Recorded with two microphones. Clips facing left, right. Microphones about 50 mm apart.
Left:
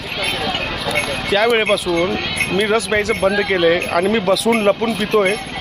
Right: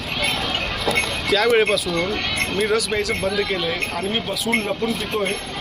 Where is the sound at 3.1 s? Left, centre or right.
Left.